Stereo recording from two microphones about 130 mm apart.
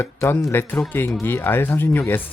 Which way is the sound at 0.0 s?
20° left (ahead or behind).